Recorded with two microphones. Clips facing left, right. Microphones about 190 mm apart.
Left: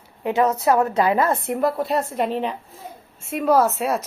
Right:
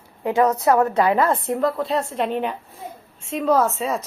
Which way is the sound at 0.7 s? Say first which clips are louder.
Right 1 dB; 30° right (ahead or behind).